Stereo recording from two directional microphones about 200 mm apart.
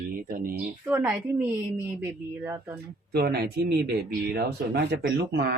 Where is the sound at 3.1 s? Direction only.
55° right (ahead or behind).